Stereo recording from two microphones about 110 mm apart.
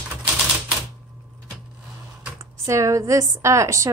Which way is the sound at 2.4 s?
30° right (ahead or behind).